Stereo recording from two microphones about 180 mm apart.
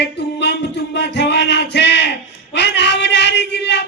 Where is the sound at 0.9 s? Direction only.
70° left (ahead or behind).